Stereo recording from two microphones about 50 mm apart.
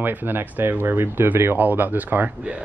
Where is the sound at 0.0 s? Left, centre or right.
Right.